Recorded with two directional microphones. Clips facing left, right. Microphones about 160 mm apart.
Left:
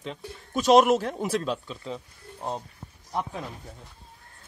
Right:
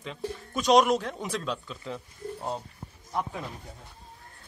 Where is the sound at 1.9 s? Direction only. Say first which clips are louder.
Right 1 dB; 15° left (ahead or behind).